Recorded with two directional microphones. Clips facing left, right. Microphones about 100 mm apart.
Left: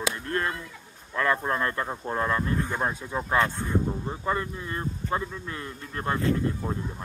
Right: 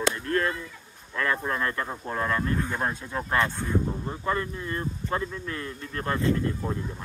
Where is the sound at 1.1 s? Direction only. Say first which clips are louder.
Left 2 dB; 25° left (ahead or behind).